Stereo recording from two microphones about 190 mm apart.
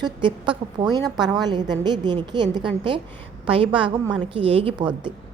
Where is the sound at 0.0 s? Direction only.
25° right (ahead or behind).